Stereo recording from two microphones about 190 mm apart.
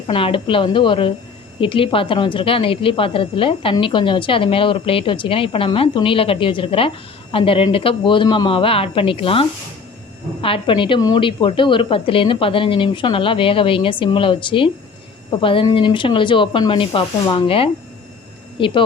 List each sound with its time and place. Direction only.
0.1 s a woman's voice: 30° left (ahead or behind)